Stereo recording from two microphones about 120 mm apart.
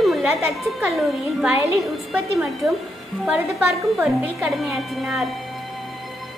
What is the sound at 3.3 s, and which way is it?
A woman's voice, 15° right (ahead or behind).